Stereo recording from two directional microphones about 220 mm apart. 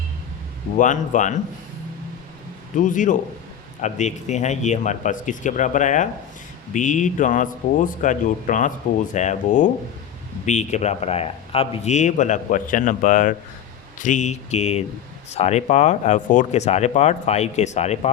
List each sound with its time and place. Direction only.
0.8 s speech: 35° left (ahead or behind)
2.7 s speech: 35° left (ahead or behind)